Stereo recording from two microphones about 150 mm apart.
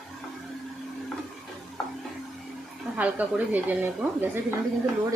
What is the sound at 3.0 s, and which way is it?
A woman's voice, 10° right (ahead or behind).